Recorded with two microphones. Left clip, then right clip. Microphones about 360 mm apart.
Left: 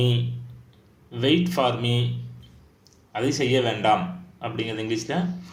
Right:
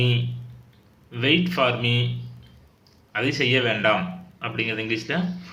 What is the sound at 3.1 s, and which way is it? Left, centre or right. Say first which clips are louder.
Speech: right 1 dB; centre.